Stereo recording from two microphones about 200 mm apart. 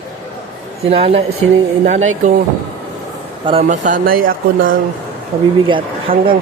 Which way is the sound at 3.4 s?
30° right (ahead or behind).